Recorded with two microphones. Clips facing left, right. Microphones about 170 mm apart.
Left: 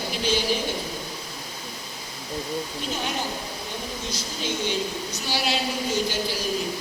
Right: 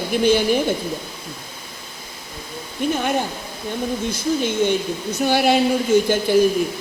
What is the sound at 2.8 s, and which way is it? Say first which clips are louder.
Speech: right 10 dB; 55° right (ahead or behind).